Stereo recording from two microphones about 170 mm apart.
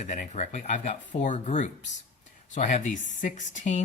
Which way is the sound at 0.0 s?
45° left (ahead or behind).